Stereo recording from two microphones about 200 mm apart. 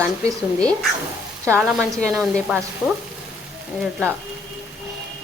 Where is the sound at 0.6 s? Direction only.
5° left (ahead or behind).